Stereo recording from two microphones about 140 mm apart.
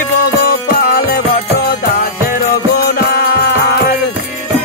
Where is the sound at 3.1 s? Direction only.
90° left.